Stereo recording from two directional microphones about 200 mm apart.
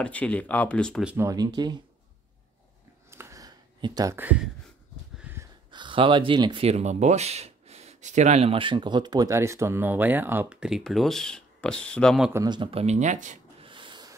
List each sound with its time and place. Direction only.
0.0 s speech: 5° left (ahead or behind)
1.1 s speech: 15° right (ahead or behind)
3.1 s a sound: 15° right (ahead or behind)
5.2 s wheeze: 10° right (ahead or behind)
5.7 s speech: 25° right (ahead or behind); by 12.3 s 5° left (ahead or behind)
12.3 s speech: 15° right (ahead or behind); by 13.7 s 40° right (ahead or behind)
13.7 s a sound: 25° right (ahead or behind)